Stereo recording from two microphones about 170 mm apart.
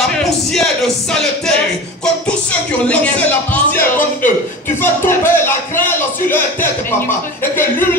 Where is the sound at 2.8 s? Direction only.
5° left (ahead or behind).